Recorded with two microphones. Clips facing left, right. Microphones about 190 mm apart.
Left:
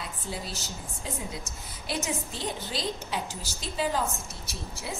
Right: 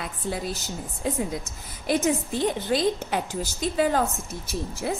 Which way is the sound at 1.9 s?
50° right (ahead or behind).